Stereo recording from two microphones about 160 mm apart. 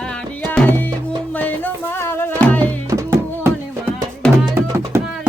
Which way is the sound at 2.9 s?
20° right (ahead or behind).